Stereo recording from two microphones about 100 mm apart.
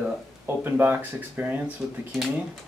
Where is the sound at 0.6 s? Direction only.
20° right (ahead or behind).